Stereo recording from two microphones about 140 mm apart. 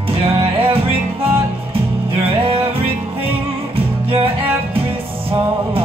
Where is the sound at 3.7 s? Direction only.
40° right (ahead or behind).